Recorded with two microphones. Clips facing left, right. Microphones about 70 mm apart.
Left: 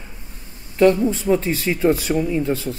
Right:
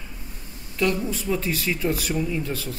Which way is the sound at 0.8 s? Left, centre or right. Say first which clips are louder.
Left 9 dB; left.